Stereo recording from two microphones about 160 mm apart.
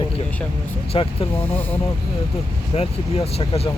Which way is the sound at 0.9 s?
35° left (ahead or behind).